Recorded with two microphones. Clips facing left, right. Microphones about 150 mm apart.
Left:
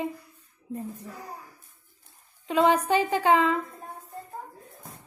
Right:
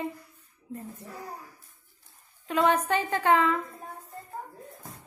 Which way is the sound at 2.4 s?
15° left (ahead or behind).